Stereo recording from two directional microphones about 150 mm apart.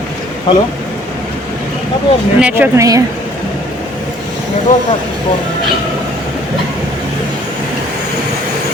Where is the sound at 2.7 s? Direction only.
25° right (ahead or behind).